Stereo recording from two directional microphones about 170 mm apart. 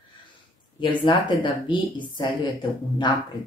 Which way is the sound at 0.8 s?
30° left (ahead or behind).